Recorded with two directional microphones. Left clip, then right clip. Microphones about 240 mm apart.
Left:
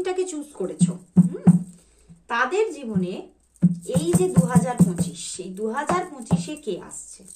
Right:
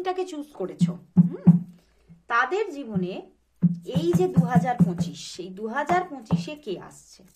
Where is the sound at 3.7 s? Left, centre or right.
Right.